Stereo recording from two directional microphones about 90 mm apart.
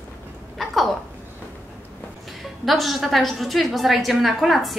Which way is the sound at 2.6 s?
Centre (ahead or behind).